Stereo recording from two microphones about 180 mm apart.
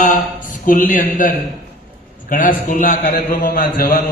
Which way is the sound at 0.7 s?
50° left (ahead or behind).